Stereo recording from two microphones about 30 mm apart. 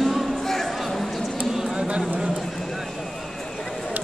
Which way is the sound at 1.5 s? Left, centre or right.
Centre.